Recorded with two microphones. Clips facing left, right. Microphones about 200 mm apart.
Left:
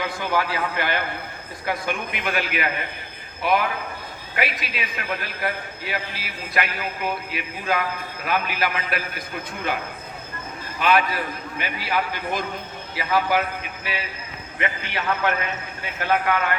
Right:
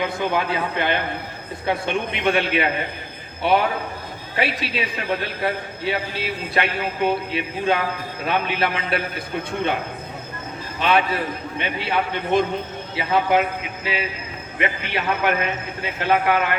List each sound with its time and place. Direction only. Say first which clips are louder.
0.1 s a man's voice: right 2 dB; 20° right (ahead or behind)
10.8 s a man's voice: right 1 dB; 25° right (ahead or behind)